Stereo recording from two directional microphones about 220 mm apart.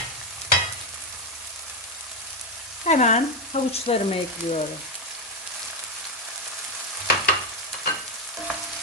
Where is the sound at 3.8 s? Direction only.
25° left (ahead or behind).